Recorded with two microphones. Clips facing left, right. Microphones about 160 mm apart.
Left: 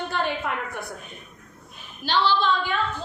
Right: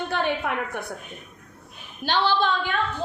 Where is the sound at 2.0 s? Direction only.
50° right (ahead or behind).